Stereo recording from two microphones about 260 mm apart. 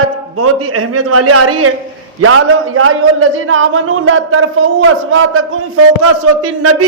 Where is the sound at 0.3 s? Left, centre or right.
Right.